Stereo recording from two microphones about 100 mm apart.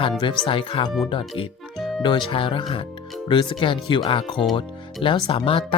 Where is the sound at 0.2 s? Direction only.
60° left (ahead or behind).